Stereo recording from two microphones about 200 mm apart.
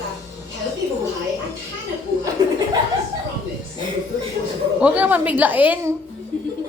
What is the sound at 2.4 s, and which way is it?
Chuckle, 20° right (ahead or behind).